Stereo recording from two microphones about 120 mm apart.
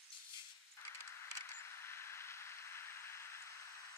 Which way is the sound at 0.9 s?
20° left (ahead or behind).